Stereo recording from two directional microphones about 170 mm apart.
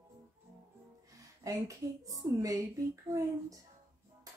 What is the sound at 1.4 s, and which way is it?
A woman's voice, 20° right (ahead or behind).